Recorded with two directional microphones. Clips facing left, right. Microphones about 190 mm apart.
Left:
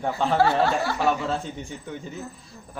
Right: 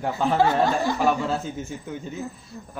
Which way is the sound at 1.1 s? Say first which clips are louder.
Right 1 dB; centre (ahead or behind).